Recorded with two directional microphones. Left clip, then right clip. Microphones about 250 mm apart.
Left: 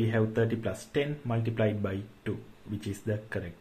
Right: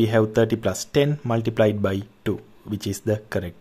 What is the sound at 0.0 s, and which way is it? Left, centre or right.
Speech, right.